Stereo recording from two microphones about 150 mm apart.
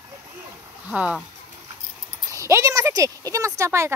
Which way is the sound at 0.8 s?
10° right (ahead or behind).